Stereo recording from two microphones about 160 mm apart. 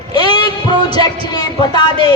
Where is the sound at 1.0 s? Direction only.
25° left (ahead or behind).